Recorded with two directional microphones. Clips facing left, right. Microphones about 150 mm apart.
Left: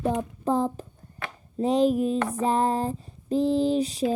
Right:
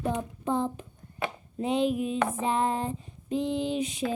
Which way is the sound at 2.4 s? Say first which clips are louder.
Left 7 dB; 35° left (ahead or behind).